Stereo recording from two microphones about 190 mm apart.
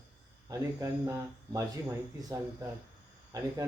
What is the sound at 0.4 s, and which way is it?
Speech, 15° right (ahead or behind).